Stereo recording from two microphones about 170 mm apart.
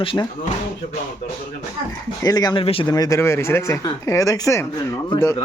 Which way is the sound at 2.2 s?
25° left (ahead or behind).